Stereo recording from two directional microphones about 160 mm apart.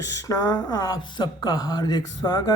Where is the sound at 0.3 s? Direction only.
25° left (ahead or behind).